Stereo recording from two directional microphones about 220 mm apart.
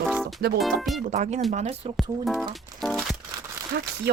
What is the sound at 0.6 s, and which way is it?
Speech, centre (ahead or behind).